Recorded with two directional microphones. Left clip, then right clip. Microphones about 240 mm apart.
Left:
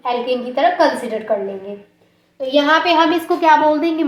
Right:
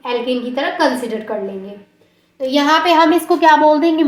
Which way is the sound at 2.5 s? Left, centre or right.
Right.